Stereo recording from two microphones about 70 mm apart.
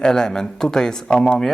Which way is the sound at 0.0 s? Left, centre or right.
Centre.